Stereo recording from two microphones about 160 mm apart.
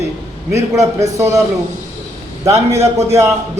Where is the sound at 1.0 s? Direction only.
20° right (ahead or behind).